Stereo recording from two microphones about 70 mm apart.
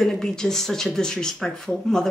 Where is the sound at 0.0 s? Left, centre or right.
Centre.